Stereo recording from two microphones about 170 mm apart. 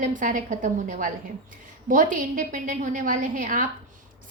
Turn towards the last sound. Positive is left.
turn(degrees=-50)  # may be behind; listen again after turning